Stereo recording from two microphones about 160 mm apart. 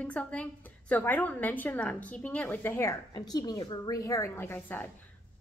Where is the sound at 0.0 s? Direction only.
10° left (ahead or behind).